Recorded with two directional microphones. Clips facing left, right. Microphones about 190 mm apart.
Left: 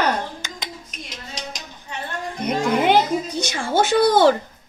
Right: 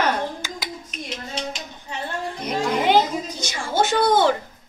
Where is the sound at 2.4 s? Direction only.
60° left (ahead or behind).